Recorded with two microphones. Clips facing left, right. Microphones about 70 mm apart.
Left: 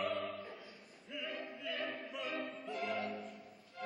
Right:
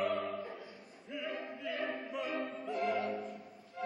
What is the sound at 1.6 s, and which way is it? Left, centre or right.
Music, centre.